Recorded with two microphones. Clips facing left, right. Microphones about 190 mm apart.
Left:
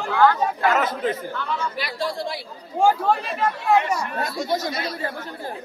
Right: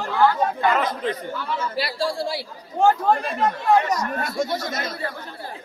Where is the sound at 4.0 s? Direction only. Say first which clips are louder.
Right 2 dB; 45° right (ahead or behind).